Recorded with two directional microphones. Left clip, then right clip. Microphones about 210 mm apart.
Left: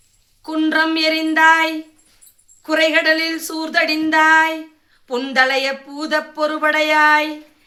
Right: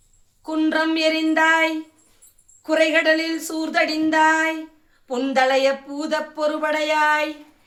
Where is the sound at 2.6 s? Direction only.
25° left (ahead or behind).